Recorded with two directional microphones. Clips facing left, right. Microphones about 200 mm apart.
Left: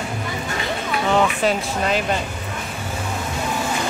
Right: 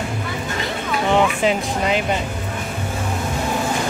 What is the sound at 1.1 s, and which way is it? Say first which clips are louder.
Speech: right 1 dB; 15° right (ahead or behind).